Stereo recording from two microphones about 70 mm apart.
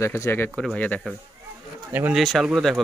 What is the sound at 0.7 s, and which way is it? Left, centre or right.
Speech, left.